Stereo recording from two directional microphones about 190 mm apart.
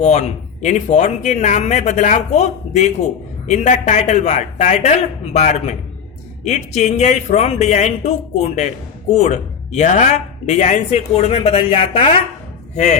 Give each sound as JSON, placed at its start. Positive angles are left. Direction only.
{"t": 0.0, "sound": "speech", "side_deg": 35}